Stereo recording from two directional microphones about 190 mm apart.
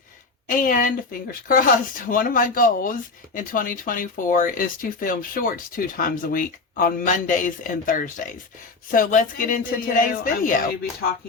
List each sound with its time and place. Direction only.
0.4 s speech: 45° left (ahead or behind)